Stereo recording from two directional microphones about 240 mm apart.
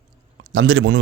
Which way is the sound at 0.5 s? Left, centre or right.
Right.